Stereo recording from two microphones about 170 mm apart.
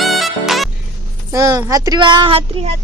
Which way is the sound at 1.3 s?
20° right (ahead or behind).